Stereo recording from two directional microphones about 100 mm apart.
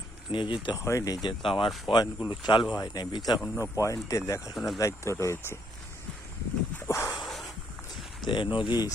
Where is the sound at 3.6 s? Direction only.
30° left (ahead or behind).